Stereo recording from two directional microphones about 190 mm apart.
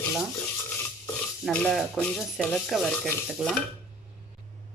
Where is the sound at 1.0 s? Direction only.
5° left (ahead or behind).